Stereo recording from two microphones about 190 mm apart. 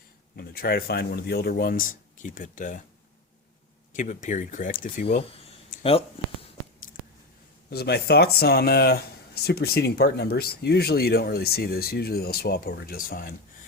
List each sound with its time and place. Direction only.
0.3 s speech: 55° left (ahead or behind)
3.9 s speech: 40° left (ahead or behind)
5.8 s speech: 30° left (ahead or behind)
7.7 s speech: 55° left (ahead or behind)